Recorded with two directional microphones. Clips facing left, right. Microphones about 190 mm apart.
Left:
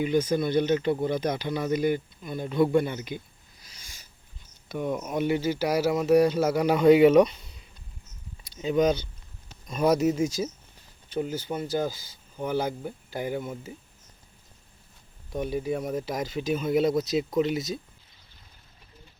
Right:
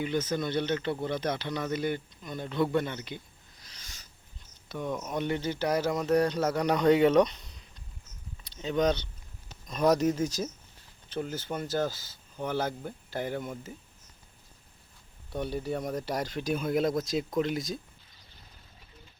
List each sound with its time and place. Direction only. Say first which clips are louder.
0.0 s speech: left 5 dB; 15° left (ahead or behind)
3.6 s a sound: left 1 dB; 10° left (ahead or behind)
4.7 s speech: left 4 dB; 10° left (ahead or behind)
15.3 s speech: left 4 dB; 10° left (ahead or behind)